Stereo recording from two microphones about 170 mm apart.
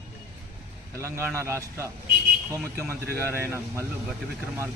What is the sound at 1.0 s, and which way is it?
Speech, 15° right (ahead or behind).